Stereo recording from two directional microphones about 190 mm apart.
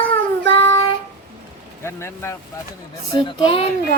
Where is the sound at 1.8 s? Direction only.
15° left (ahead or behind).